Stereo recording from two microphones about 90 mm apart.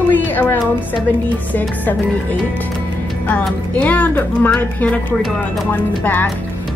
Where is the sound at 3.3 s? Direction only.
15° left (ahead or behind).